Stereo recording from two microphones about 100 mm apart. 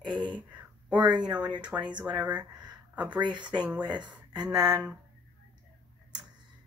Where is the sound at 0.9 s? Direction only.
50° right (ahead or behind).